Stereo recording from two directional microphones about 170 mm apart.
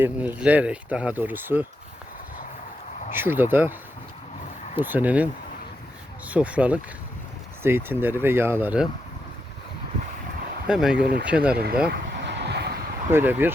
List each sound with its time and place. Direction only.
0.0 s speech: 10° right (ahead or behind)
3.1 s speech: 10° right (ahead or behind)
4.8 s speech: 10° right (ahead or behind)
6.3 s speech: 10° right (ahead or behind)
10.7 s speech: 5° right (ahead or behind)
11.5 s speech: 65° right (ahead or behind)
11.9 s vehicle: 90° right
13.1 s speech: 10° right (ahead or behind)